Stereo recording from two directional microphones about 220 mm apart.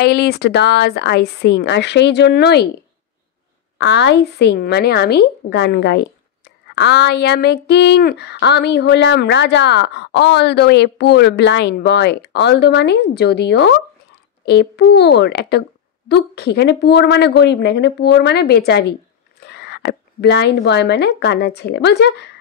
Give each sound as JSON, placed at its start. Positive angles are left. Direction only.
{"t": 0.0, "sound": "a woman's voice", "side_deg": 45}
{"t": 3.7, "sound": "a woman's voice", "side_deg": 55}